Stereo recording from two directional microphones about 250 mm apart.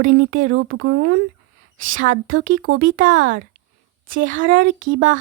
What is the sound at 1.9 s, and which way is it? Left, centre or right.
A woman's voice, right.